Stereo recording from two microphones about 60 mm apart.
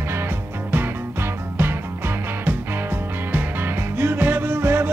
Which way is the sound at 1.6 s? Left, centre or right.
Right.